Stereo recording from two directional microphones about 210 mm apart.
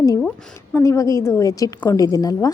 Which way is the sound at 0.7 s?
15° left (ahead or behind).